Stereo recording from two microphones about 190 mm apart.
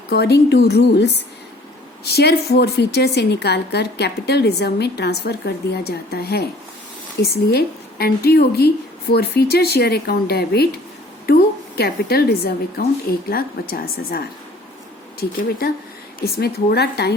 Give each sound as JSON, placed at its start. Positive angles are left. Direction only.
{"t": 0.1, "sound": "a woman's voice", "side_deg": 60}
{"t": 11.8, "sound": "a woman's voice", "side_deg": 55}
{"t": 15.2, "sound": "a woman's voice", "side_deg": 55}